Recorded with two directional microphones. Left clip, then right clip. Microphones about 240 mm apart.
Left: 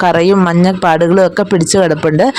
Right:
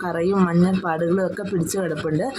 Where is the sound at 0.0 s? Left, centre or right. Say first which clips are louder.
Left 12 dB; left.